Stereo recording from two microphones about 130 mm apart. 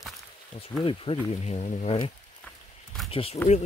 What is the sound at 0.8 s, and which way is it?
Speech, 45° left (ahead or behind).